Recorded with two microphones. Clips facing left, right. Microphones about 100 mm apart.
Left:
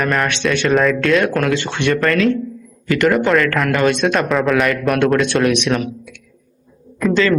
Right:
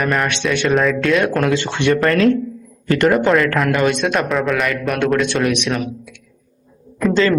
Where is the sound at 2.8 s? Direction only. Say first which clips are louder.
Even; 35° right (ahead or behind).